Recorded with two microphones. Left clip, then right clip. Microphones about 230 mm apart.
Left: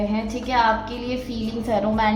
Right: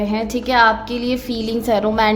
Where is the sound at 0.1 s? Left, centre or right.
Right.